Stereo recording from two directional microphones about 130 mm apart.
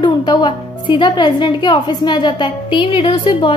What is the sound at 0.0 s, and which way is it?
A woman's voice, 35° left (ahead or behind).